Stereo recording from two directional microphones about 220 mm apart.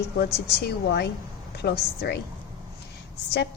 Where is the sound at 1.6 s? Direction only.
50° left (ahead or behind).